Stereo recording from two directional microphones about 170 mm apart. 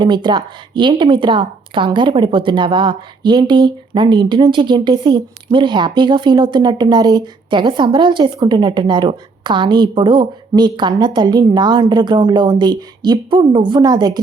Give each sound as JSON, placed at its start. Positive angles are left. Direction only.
{"t": 0.0, "sound": "a woman's voice", "side_deg": -25}